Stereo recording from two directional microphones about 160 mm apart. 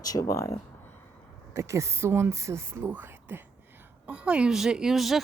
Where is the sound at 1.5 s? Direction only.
20° right (ahead or behind).